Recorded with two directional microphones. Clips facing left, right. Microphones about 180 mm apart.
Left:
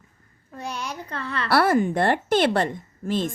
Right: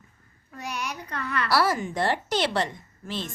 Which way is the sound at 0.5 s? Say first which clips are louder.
Left 2 dB; 30° left (ahead or behind).